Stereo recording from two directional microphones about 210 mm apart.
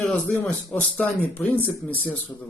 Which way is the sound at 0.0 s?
5° left (ahead or behind).